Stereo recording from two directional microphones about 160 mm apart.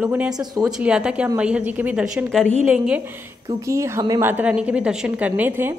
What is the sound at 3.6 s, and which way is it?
A woman's voice, 20° right (ahead or behind).